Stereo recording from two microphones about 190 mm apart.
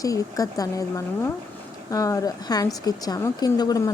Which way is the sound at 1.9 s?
15° left (ahead or behind).